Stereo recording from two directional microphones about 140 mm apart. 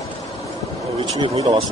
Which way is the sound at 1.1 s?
35° right (ahead or behind).